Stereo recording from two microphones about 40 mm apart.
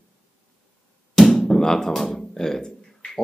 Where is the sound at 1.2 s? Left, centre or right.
Centre.